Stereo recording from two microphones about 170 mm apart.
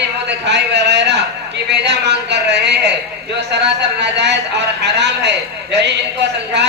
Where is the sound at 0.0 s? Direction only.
90° right.